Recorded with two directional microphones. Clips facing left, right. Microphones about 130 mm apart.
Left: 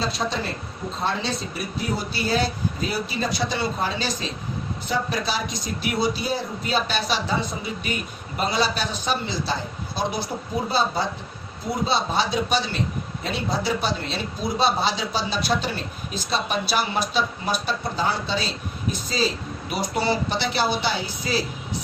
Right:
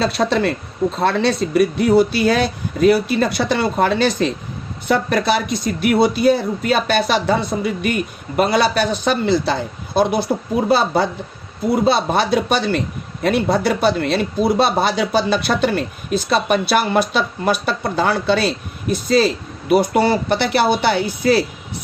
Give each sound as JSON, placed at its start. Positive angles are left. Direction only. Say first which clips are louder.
{"t": 0.0, "sound": "speech", "louder": "right 9 dB", "side_deg": -70}